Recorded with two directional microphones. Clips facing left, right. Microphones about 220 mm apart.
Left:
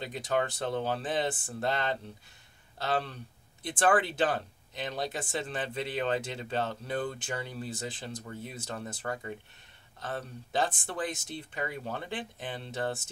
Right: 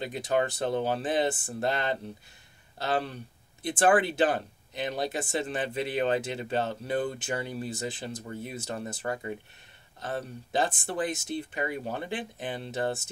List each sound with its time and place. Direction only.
0.0 s speech: 10° right (ahead or behind)